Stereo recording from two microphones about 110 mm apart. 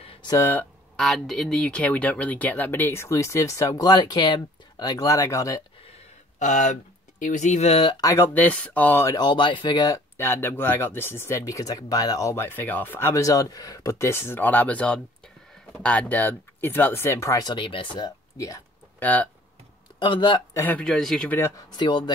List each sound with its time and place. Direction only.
0.3 s speech: 25° left (ahead or behind)
0.9 s speech: 5° left (ahead or behind); by 5.6 s 30° left (ahead or behind)
7.3 s speech: 90° left; by 8.0 s 60° left (ahead or behind)
8.0 s speech: 30° left (ahead or behind)
8.4 s speech: 15° left (ahead or behind)
9.1 s speech: 45° left (ahead or behind)
10.1 s speech: 20° left (ahead or behind)
12.4 s speech: 15° left (ahead or behind); by 18.6 s 35° left (ahead or behind)
18.9 s speech: 15° left (ahead or behind)
20.0 s speech: 45° left (ahead or behind)
20.5 s speech: 15° left (ahead or behind)
21.7 s speech: 45° left (ahead or behind)